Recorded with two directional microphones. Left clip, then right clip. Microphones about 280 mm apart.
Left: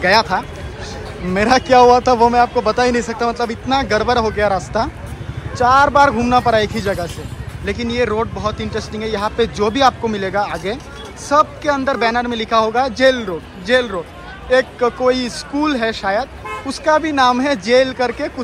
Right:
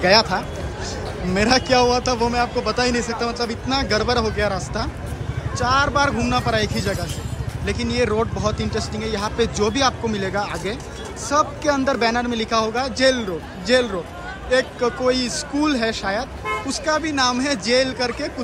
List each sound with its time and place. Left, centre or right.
0.0 s a man's voice: centre